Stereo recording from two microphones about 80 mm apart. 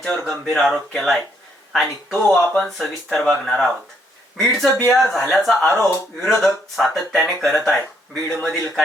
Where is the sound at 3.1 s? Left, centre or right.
Centre.